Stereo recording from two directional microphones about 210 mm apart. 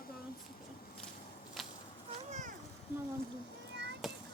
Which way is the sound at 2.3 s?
35° right (ahead or behind).